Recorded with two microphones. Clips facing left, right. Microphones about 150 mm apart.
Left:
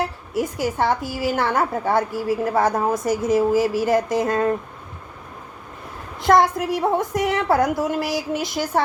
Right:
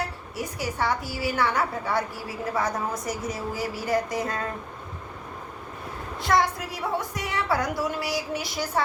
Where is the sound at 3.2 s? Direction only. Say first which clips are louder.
Left 12 dB; 90° left.